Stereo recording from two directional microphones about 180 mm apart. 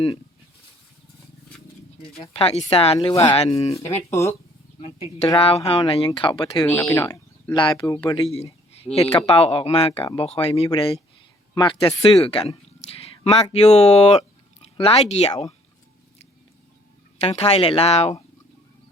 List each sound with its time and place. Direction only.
2.2 s speech: 35° left (ahead or behind)
3.1 s speech: 15° left (ahead or behind)
3.3 s speech: 35° left (ahead or behind)
3.8 s speech: 15° left (ahead or behind)
5.4 s speech: 30° left (ahead or behind)
6.7 s speech: 10° left (ahead or behind); by 10.5 s 30° left (ahead or behind)
11.5 s speech: 25° left (ahead or behind)
17.2 s speech: 35° left (ahead or behind)